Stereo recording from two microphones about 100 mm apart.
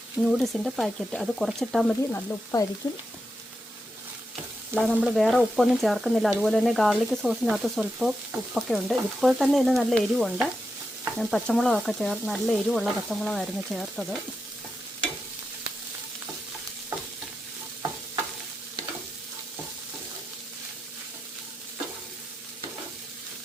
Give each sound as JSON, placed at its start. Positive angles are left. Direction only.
{"t": 0.2, "sound": "speech", "side_deg": 0}
{"t": 2.0, "sound": "frying", "side_deg": 30}
{"t": 4.7, "sound": "frying", "side_deg": -25}
{"t": 5.1, "sound": "speech", "side_deg": 0}